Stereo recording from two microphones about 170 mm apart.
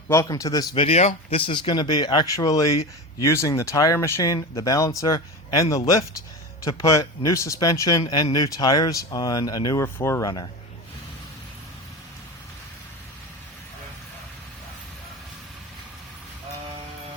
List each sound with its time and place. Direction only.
0.1 s speech: 20° left (ahead or behind)
0.8 s speech: 40° left (ahead or behind); by 10.5 s 25° left (ahead or behind)